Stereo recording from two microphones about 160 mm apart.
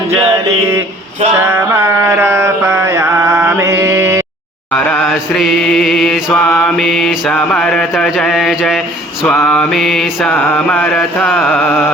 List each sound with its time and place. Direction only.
1.5 s mantra: 15° right (ahead or behind)
4.7 s mantra: 5° left (ahead or behind)